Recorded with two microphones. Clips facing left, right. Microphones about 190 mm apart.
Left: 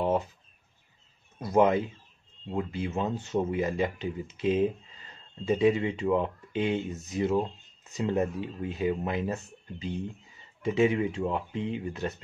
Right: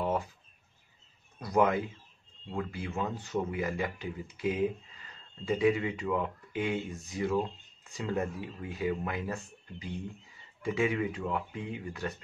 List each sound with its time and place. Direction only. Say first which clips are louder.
1.4 s speech: left 4 dB; 25° left (ahead or behind)